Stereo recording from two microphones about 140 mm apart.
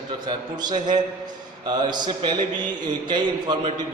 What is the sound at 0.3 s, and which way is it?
A man's voice, 30° right (ahead or behind).